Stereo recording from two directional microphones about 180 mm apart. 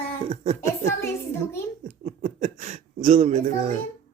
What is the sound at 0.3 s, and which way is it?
Speech, 35° right (ahead or behind).